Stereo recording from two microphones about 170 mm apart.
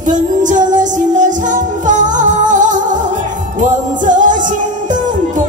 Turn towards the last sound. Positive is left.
turn(degrees=-50)  # may be behind; listen again after turning